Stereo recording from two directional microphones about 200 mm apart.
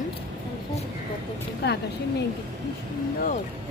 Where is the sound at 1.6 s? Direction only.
55° left (ahead or behind).